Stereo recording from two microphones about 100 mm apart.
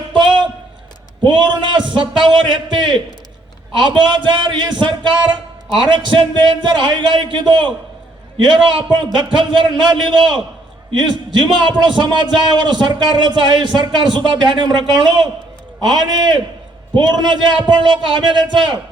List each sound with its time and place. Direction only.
0.1 s a sound: 50° right (ahead or behind)
1.2 s a man's voice: 50° right (ahead or behind)
9.1 s a man's voice: 50° right (ahead or behind)